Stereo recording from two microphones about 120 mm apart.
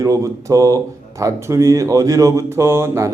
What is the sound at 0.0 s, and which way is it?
Speech, 25° right (ahead or behind).